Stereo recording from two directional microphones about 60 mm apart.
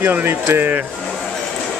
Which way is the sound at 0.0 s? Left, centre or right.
Right.